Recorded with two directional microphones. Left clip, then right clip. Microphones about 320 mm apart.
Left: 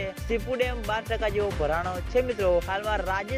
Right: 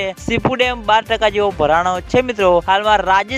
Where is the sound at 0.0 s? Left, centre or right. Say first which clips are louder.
Right 12 dB; right.